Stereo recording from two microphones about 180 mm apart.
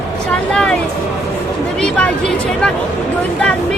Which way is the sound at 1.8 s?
5° left (ahead or behind).